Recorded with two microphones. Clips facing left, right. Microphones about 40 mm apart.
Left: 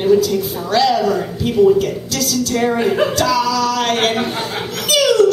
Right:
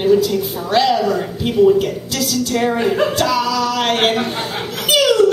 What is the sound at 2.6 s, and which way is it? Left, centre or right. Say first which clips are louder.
Speech: left 1 dB; centre.